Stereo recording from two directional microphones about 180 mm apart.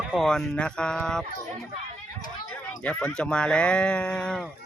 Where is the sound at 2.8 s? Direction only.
5° left (ahead or behind).